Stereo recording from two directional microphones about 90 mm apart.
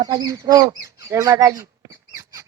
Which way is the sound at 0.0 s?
50° right (ahead or behind).